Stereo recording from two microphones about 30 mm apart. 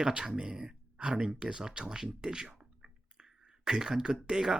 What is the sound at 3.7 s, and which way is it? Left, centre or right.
Speech, right.